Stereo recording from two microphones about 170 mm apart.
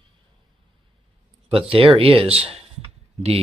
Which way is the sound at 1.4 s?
35° right (ahead or behind).